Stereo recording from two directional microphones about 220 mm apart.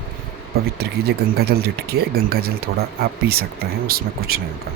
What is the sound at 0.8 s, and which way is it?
Speech, 45° right (ahead or behind).